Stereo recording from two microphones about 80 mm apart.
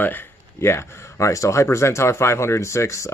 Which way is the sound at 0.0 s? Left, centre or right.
Left.